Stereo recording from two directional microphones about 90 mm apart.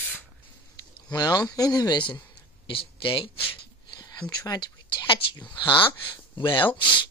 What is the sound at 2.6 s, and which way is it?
Speech, 75° left (ahead or behind).